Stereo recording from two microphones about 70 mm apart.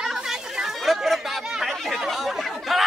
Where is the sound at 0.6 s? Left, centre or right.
Centre.